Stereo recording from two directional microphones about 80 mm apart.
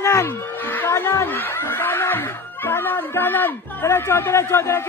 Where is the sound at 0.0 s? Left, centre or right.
Left.